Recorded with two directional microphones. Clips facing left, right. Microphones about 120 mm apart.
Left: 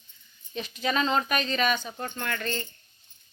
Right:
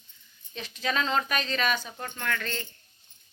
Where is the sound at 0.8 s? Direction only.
5° left (ahead or behind).